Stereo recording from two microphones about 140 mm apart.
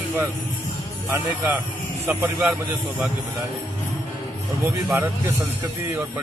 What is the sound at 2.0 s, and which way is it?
Speech, 15° right (ahead or behind).